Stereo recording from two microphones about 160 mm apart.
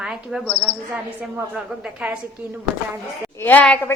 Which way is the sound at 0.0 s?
5° right (ahead or behind).